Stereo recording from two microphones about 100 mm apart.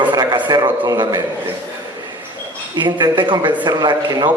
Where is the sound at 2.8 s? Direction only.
45° right (ahead or behind).